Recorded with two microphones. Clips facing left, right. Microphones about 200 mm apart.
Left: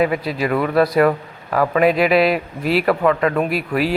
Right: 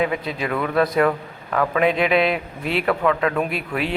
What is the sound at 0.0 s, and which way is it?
A man's voice, 5° left (ahead or behind).